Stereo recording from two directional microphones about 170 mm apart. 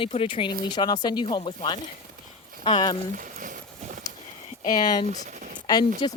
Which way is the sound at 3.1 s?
50° right (ahead or behind).